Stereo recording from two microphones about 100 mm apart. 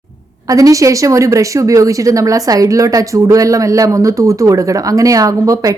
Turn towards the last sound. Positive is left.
turn(degrees=-35)  # may be behind; listen again after turning